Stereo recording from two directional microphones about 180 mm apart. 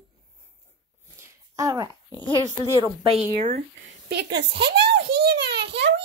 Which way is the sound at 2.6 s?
25° left (ahead or behind).